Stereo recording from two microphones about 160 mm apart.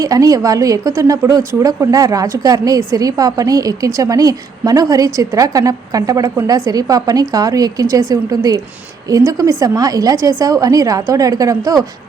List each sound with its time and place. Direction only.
0.0 s a woman's voice: 20° right (ahead or behind)